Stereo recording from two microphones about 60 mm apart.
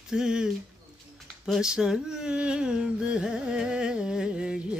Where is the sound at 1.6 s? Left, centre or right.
Centre.